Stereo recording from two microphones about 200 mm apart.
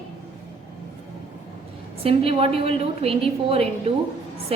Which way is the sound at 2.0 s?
30° right (ahead or behind).